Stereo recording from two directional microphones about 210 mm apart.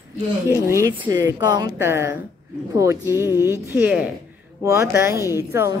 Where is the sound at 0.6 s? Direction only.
15° right (ahead or behind).